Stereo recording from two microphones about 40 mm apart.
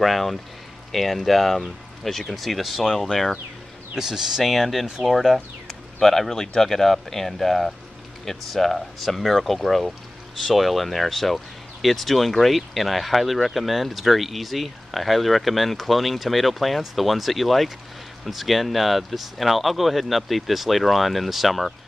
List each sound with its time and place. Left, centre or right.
0.0 s speech: centre
3.9 s speech: centre